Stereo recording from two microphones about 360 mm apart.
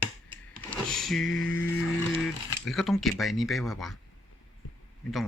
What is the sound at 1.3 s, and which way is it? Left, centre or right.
Music, left.